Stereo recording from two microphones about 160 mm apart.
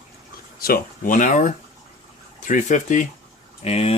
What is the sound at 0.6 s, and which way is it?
Speech, 65° left (ahead or behind).